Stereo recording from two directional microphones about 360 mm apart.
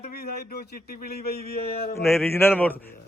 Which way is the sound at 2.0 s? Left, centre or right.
Centre.